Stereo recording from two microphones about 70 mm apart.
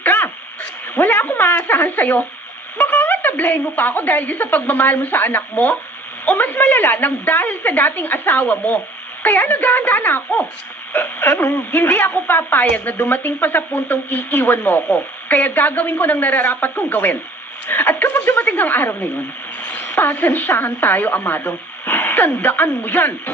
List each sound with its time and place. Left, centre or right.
0.0 s radio: left
0.9 s speech: left